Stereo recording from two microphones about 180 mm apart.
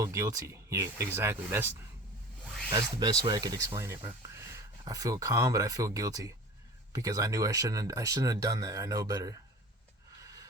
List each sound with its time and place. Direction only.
0.0 s speech: 20° right (ahead or behind)
2.4 s a sound: centre (ahead or behind)
3.0 s speech: 20° right (ahead or behind)